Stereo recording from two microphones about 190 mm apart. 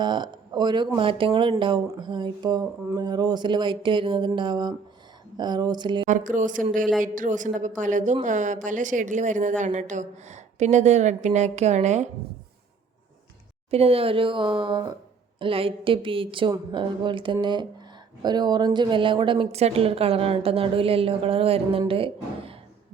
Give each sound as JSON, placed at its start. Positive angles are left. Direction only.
{"t": 0.0, "sound": "a woman's voice", "side_deg": -25}
{"t": 6.1, "sound": "speech", "side_deg": -40}
{"t": 13.7, "sound": "a woman's voice", "side_deg": -30}